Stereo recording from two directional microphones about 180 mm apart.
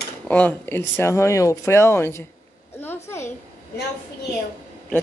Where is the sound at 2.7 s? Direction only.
15° left (ahead or behind).